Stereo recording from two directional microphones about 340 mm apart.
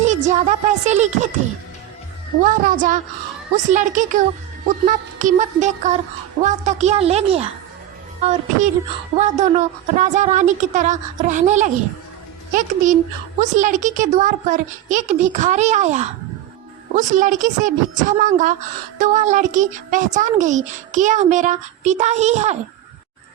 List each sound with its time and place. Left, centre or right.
0.0 s a child's voice: right
2.4 s a child's voice: right